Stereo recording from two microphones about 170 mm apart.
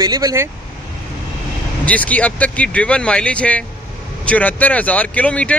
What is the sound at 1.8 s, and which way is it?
Speech, 10° left (ahead or behind).